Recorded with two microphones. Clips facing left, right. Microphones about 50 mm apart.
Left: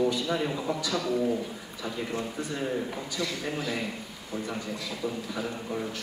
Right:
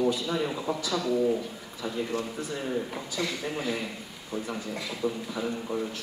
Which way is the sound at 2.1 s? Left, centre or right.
Left.